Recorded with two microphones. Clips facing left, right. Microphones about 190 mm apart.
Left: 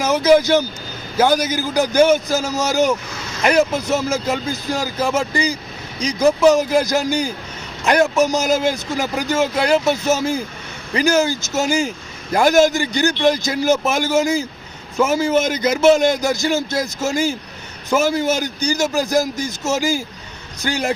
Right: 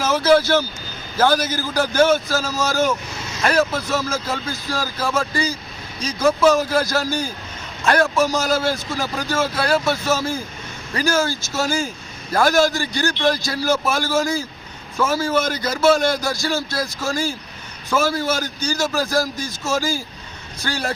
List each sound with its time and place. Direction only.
0.0 s a man's voice: 15° left (ahead or behind)